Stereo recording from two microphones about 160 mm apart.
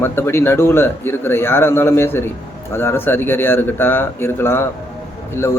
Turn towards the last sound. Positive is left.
turn(degrees=15)  # may be behind; listen again after turning